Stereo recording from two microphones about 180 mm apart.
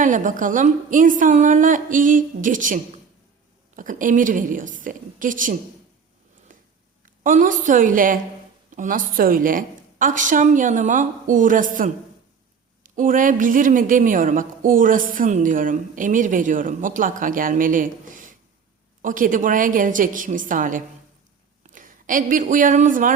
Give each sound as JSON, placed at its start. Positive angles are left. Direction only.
{"t": 0.0, "sound": "a woman's voice", "side_deg": -45}
{"t": 6.5, "sound": "a sound", "side_deg": -50}
{"t": 7.0, "sound": "a woman's voice", "side_deg": -45}